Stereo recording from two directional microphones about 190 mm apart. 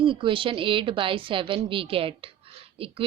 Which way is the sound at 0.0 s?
25° right (ahead or behind).